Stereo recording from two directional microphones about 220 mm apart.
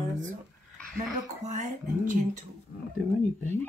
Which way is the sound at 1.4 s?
35° right (ahead or behind).